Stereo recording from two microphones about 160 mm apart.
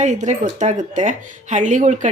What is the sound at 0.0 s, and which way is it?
Speech, 50° right (ahead or behind).